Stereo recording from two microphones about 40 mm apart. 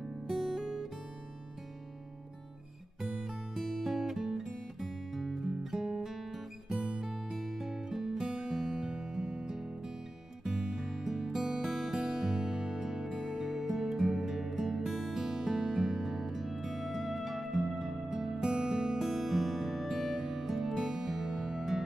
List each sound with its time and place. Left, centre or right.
0.3 s guitar: centre
3.3 s music: centre
6.8 s music: right
7.1 s music: centre
11.6 s music: centre
12.0 s music: centre
18.9 s music: centre